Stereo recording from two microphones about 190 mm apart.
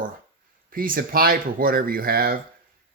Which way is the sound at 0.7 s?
45° right (ahead or behind).